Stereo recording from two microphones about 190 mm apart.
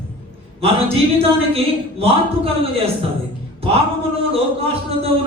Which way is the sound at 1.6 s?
30° right (ahead or behind).